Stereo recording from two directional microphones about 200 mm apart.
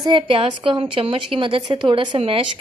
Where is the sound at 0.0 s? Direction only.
25° right (ahead or behind).